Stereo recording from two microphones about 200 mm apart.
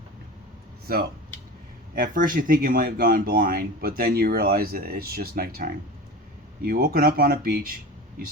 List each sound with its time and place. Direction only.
2.0 s speech: 45° right (ahead or behind)